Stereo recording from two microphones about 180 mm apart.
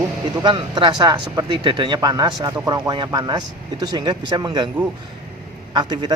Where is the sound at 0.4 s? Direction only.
25° right (ahead or behind).